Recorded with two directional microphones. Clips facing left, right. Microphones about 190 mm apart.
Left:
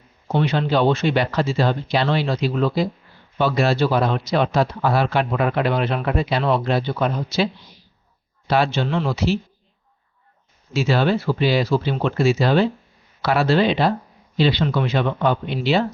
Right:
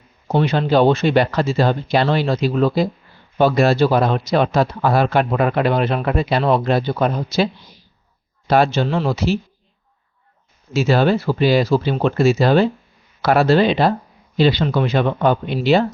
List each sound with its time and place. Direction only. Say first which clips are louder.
0.3 s speech: right 3 dB; 40° right (ahead or behind)
10.8 s speech: right 3 dB; 45° right (ahead or behind)